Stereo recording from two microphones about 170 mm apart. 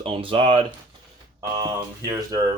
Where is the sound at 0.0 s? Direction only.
30° right (ahead or behind).